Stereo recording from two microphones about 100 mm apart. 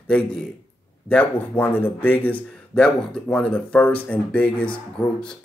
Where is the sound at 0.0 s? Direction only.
10° left (ahead or behind).